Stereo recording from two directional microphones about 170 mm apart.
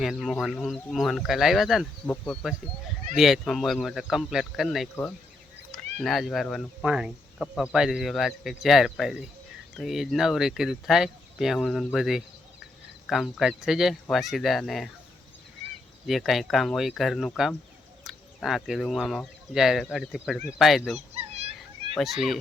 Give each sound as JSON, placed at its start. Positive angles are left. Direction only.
{"t": 0.0, "sound": "speech", "side_deg": 0}
{"t": 16.0, "sound": "speech", "side_deg": 0}